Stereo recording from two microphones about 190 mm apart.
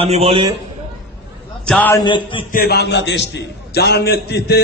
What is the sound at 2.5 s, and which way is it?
A man's voice, 55° left (ahead or behind).